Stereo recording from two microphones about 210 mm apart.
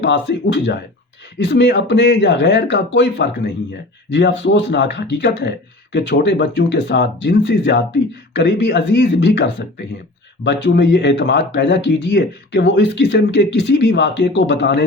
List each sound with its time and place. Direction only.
0.0 s speech: 55° left (ahead or behind)